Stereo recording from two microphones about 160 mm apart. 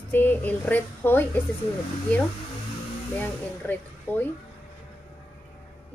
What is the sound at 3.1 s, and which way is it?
A woman's voice, 10° left (ahead or behind).